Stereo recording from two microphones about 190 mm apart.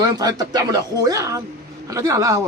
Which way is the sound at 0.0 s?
20° right (ahead or behind).